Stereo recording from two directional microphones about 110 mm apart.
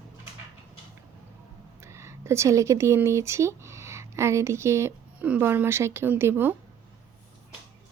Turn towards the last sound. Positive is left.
turn(degrees=-20)  # may be behind; listen again after turning